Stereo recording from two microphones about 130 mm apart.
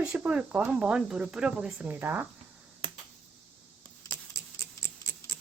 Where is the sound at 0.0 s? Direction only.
10° right (ahead or behind).